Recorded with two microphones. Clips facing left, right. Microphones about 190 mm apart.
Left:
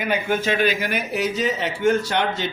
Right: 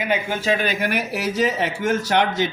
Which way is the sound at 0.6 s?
60° right (ahead or behind).